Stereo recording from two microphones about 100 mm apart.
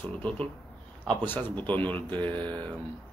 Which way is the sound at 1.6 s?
15° left (ahead or behind).